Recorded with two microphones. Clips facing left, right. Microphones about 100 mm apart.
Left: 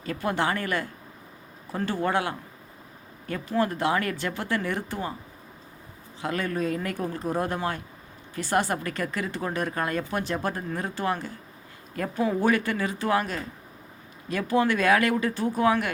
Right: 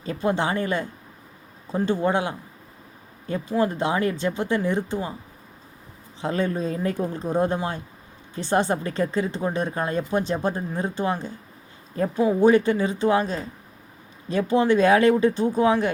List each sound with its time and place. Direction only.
0.0 s speech: 25° right (ahead or behind)
6.2 s speech: 25° right (ahead or behind)